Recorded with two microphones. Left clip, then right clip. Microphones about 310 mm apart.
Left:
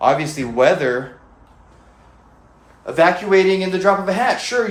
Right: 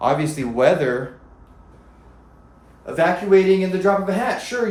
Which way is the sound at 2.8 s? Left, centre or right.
Centre.